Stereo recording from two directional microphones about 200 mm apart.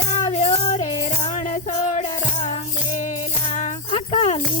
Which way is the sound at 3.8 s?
25° left (ahead or behind).